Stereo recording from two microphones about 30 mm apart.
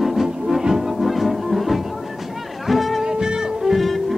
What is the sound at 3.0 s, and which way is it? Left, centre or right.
Music, right.